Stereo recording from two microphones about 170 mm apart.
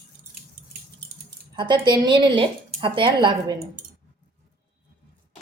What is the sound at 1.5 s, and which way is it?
Speech, 30° right (ahead or behind).